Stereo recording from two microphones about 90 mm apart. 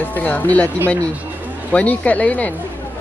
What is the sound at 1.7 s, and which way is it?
Speech, 15° left (ahead or behind).